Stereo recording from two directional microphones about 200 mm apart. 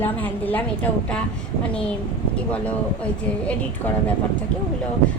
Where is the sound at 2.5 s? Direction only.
5° left (ahead or behind).